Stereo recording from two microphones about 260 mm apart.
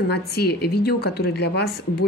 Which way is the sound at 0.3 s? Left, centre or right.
Left.